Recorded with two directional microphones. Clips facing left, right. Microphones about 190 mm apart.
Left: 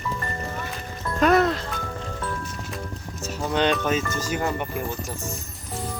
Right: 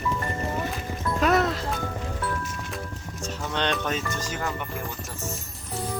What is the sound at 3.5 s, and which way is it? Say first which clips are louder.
Speech: left 5 dB; 5° left (ahead or behind).